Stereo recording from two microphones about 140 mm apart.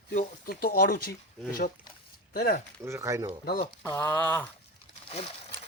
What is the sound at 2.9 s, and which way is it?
Speech, 20° right (ahead or behind).